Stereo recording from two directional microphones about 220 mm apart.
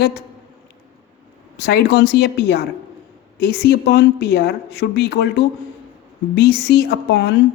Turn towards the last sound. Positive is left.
turn(degrees=50)  # may be behind; listen again after turning